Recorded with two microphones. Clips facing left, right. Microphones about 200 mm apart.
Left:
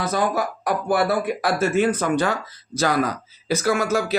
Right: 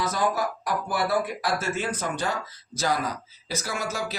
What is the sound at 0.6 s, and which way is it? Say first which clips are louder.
Speech: left 6 dB; 60° left (ahead or behind).